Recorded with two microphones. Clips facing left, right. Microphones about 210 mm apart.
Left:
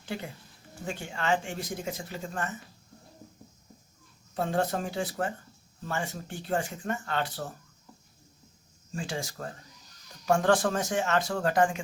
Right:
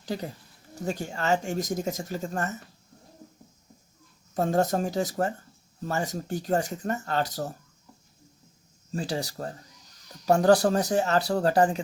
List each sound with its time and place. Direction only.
0.0 s speech: 40° right (ahead or behind)
4.4 s speech: 40° right (ahead or behind)
8.9 s speech: 35° right (ahead or behind)